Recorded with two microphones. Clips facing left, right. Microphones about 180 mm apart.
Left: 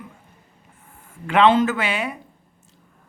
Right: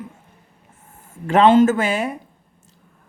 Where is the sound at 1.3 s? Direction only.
45° right (ahead or behind).